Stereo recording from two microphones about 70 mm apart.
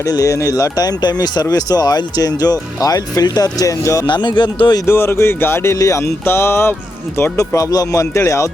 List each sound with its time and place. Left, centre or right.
0.0 s speech: left
4.1 s speech: left
4.9 s speech: left
6.2 s speech: left
7.3 s speech: left
8.1 s speech: left